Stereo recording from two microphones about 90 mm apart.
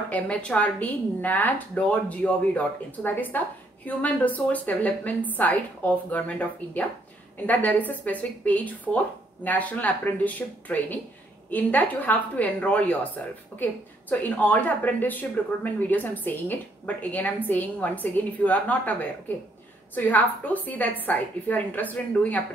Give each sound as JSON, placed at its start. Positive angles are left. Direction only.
{"t": 0.1, "sound": "speech", "side_deg": 10}